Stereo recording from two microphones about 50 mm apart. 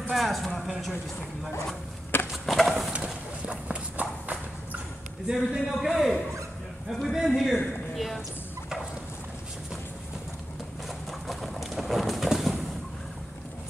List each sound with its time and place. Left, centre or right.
0.1 s speech: centre
2.3 s a sound: centre
2.9 s clip-clop: right
5.3 s speech: centre
11.1 s bird: centre